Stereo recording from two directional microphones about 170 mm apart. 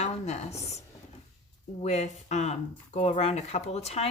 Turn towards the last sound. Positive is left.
turn(degrees=40)  # may be behind; listen again after turning